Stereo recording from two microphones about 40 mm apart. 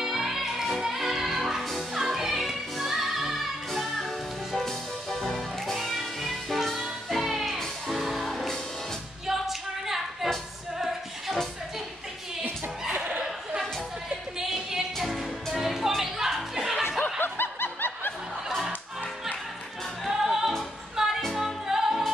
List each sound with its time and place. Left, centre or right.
0.0 s music: centre
4.6 s music: centre
9.2 s a capella: centre
14.4 s music: centre
15.0 s music: centre
17.2 s snicker: left
20.1 s music: centre